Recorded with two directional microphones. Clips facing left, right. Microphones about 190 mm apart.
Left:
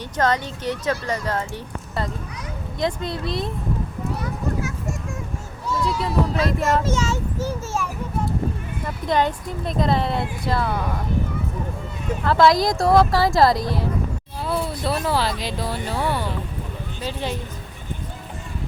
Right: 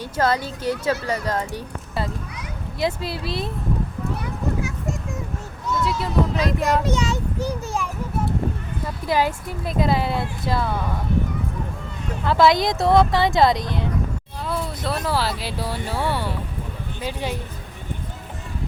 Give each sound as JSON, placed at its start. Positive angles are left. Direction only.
{"t": 0.0, "sound": "speech", "side_deg": -10}
{"t": 4.2, "sound": "a sound", "side_deg": -15}
{"t": 5.8, "sound": "speech", "side_deg": 0}
{"t": 6.8, "sound": "speech", "side_deg": -15}
{"t": 9.0, "sound": "speech", "side_deg": -5}
{"t": 12.2, "sound": "speech", "side_deg": 0}